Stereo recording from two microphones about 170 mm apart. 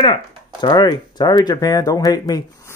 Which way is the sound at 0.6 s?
25° left (ahead or behind).